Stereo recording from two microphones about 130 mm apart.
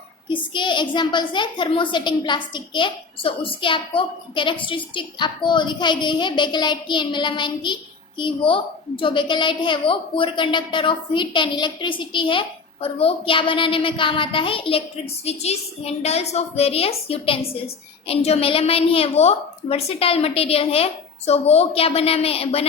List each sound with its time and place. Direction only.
0.3 s a woman's voice: 40° left (ahead or behind)